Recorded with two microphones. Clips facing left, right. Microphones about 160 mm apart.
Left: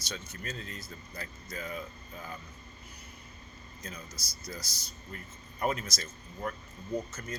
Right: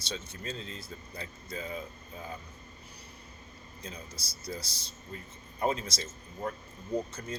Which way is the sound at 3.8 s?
30° right (ahead or behind).